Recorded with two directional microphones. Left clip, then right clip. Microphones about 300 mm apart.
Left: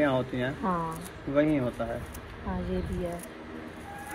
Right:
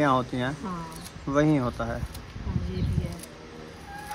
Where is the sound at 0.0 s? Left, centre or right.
Right.